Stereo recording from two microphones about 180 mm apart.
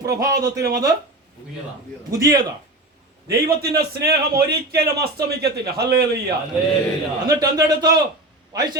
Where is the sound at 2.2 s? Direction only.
20° right (ahead or behind).